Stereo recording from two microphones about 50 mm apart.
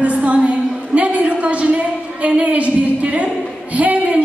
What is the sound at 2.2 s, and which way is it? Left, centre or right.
Speech, right.